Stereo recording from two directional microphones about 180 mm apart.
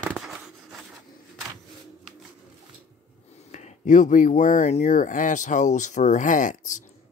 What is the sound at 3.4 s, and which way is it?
Speech, 40° left (ahead or behind).